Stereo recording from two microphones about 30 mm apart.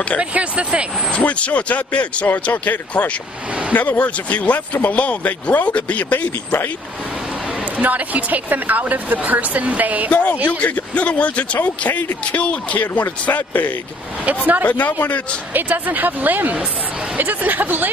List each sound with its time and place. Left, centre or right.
0.2 s speech: right
1.1 s speech: left
2.5 s a man's voice: left
7.8 s a woman's voice: right
9.3 s speech: right
10.1 s speech: left
14.2 s a woman's voice: right
14.7 s a man's voice: left
15.5 s speech: right